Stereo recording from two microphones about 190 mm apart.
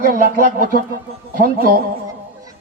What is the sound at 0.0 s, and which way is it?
Speech, 50° right (ahead or behind).